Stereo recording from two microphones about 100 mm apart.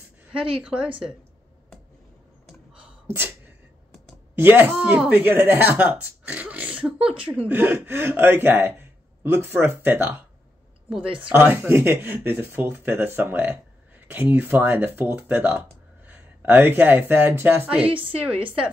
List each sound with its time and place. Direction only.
2.7 s sneeze: 15° right (ahead or behind)
4.4 s speech: 20° right (ahead or behind)
7.0 s a woman's voice: 65° right (ahead or behind)
7.2 s speech: 15° right (ahead or behind)
11.3 s speech: 20° right (ahead or behind)
17.8 s a woman's voice: 60° right (ahead or behind)